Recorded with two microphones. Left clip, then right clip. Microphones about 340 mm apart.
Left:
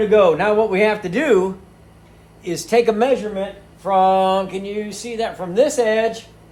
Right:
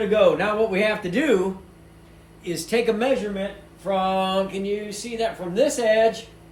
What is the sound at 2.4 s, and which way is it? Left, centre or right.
A woman's voice, centre.